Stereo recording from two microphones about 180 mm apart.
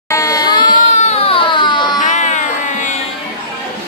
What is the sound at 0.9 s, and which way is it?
Baby cry, 35° left (ahead or behind).